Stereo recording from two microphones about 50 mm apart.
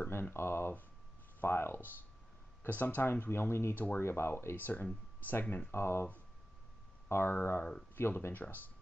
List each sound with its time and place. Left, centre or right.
0.1 s speech: left
2.7 s speech: left
3.1 s speech: left
3.7 s speech: left
4.0 s speech: left
4.6 s speech: left
5.7 s speech: left
7.1 s speech: left